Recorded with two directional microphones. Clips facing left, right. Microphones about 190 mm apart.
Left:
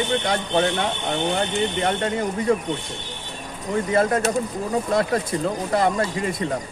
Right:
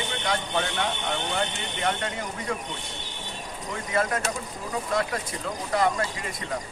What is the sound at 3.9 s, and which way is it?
Speech, 30° left (ahead or behind).